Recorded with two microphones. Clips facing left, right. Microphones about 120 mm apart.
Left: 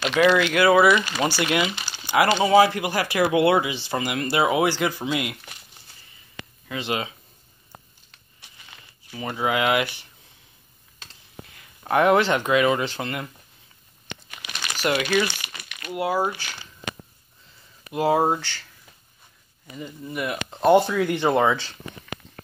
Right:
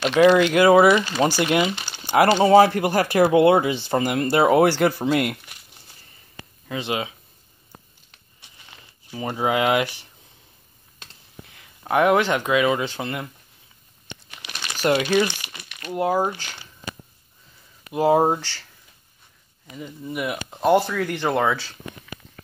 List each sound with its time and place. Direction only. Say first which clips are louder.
0.1 s speech: right 4 dB; 25° right (ahead or behind)
1.8 s crumpling: even; 5° left (ahead or behind)
2.0 s speech: right 4 dB; 40° right (ahead or behind)
3.7 s speech: right 5 dB; 45° right (ahead or behind)
4.6 s speech: right 4 dB; 60° right (ahead or behind)
5.0 s speech: right 5 dB; 50° right (ahead or behind)
6.7 s speech: right 1 dB; 20° right (ahead or behind)
9.1 s speech: right 2 dB; 30° right (ahead or behind)
11.8 s speech: even; 10° right (ahead or behind)
14.3 s crumpling: left 1 dB; 5° left (ahead or behind)
14.8 s speech: right 3 dB; 25° right (ahead or behind)
17.9 s speech: right 3 dB; 20° right (ahead or behind)
19.7 s speech: right 1 dB; centre (ahead or behind)
21.5 s a sound: even; 5° right (ahead or behind)